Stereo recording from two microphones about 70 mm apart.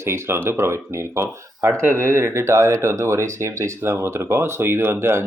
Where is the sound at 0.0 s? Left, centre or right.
Right.